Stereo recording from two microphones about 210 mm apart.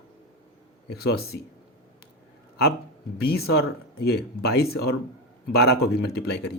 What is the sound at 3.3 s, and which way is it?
Speech, 50° left (ahead or behind).